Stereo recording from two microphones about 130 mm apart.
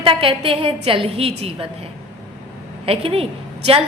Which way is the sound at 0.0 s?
45° right (ahead or behind).